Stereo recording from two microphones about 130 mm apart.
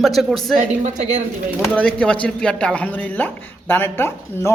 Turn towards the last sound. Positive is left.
turn(degrees=15)  # may be behind; listen again after turning